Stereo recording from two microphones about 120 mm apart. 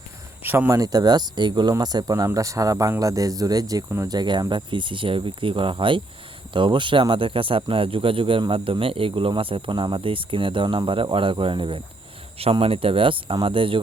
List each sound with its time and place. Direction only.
0.4 s speech: 15° right (ahead or behind)
0.8 s speech: 35° right (ahead or behind)
4.1 s speech: 35° right (ahead or behind)